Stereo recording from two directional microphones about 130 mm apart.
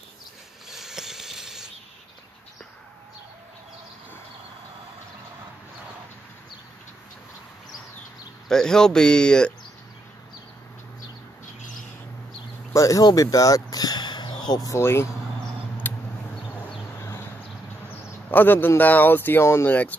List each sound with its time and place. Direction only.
0.7 s mechanisms: 5° right (ahead or behind)
8.5 s speech: 5° left (ahead or behind)
12.7 s speech: 25° left (ahead or behind)
15.8 s a sound: 15° left (ahead or behind)
18.3 s speech: 15° left (ahead or behind)